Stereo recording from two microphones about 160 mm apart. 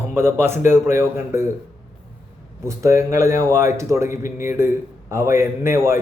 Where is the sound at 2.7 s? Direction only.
20° right (ahead or behind).